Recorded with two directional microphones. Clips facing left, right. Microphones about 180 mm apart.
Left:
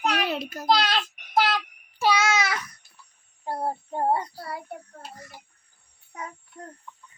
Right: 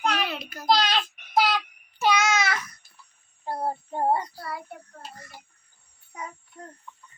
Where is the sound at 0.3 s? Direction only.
45° left (ahead or behind).